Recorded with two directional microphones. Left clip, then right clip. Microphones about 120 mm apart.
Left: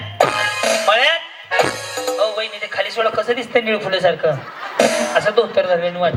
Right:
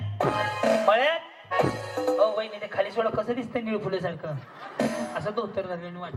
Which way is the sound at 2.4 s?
15° left (ahead or behind).